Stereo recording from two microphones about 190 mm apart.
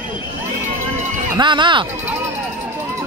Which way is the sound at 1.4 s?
25° right (ahead or behind).